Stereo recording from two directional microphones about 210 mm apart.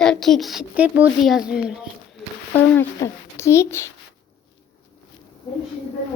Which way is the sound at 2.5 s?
10° left (ahead or behind).